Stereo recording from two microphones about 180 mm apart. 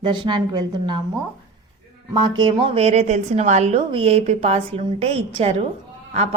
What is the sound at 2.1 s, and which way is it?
A woman's voice, 25° right (ahead or behind).